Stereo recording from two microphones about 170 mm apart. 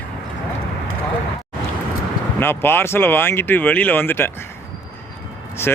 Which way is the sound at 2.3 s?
15° left (ahead or behind).